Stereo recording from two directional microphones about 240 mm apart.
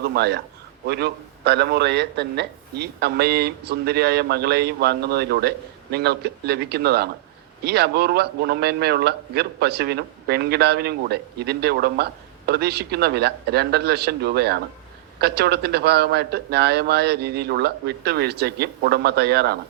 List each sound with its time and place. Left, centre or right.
0.1 s a man's voice: right